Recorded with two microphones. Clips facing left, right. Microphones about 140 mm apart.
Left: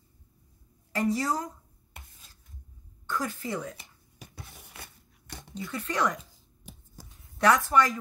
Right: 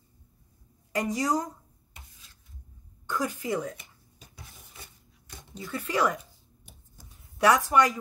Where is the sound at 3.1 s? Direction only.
15° right (ahead or behind).